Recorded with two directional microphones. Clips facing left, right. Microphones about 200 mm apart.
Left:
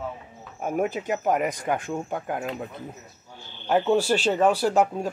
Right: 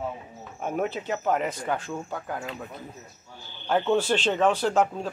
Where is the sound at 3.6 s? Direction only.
10° left (ahead or behind).